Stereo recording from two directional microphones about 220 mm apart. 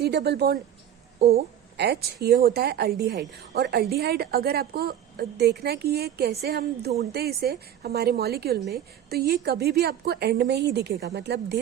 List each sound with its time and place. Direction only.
0.0 s a woman's voice: 50° right (ahead or behind)